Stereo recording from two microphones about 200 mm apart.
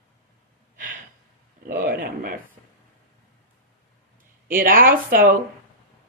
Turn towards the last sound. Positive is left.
turn(degrees=-45)  # may be behind; listen again after turning